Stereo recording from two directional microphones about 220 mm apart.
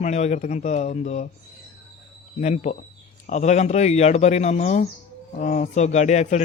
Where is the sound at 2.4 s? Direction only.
30° left (ahead or behind).